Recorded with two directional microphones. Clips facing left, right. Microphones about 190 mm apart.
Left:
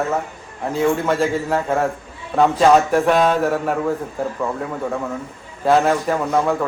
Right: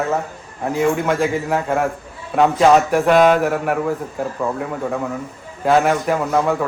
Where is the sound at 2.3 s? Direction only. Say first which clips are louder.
Right 1 dB; 5° right (ahead or behind).